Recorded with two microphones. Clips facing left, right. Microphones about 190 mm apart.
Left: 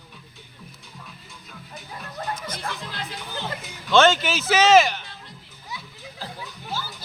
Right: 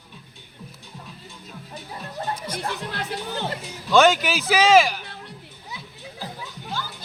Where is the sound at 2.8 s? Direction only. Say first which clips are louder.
Right 4 dB; 65° right (ahead or behind).